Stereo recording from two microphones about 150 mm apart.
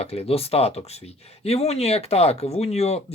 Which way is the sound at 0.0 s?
40° left (ahead or behind).